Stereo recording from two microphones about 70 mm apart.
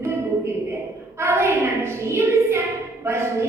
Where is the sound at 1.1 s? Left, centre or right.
Right.